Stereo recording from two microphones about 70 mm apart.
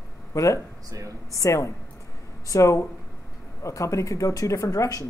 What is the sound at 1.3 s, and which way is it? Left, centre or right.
Speech, left.